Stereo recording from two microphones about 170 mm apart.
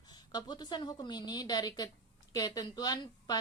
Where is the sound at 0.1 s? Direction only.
25° left (ahead or behind).